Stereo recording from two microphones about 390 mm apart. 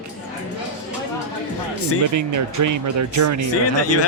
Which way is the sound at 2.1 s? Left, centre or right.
Right.